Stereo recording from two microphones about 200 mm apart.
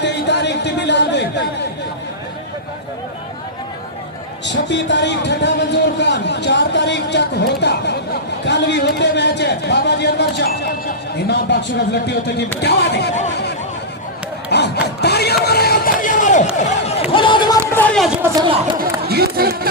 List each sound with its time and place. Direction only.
0.0 s a sound: 60° left (ahead or behind)
4.4 s a man's voice: 60° left (ahead or behind)
14.5 s a sound: 55° left (ahead or behind); by 16.9 s 35° left (ahead or behind)
17.1 s run: 25° left (ahead or behind)
17.7 s speech: 5° left (ahead or behind)
19.0 s speech: 50° right (ahead or behind)